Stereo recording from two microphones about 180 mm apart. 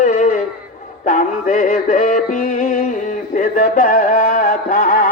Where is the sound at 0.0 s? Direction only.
40° left (ahead or behind).